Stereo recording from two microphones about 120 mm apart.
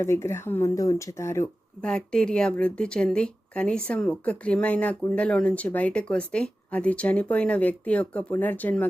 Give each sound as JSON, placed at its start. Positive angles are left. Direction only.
{"t": 0.0, "sound": "speech", "side_deg": 20}
{"t": 1.8, "sound": "speech", "side_deg": 5}